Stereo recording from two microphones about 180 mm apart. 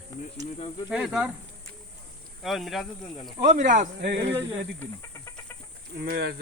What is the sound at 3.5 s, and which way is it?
Speech, 40° right (ahead or behind).